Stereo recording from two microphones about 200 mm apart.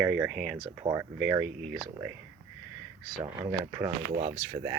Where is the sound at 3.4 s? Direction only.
10° right (ahead or behind).